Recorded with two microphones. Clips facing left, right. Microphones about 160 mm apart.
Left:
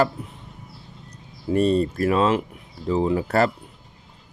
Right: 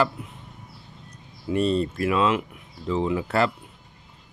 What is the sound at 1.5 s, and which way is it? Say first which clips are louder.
Speech: left 3 dB; 40° left (ahead or behind).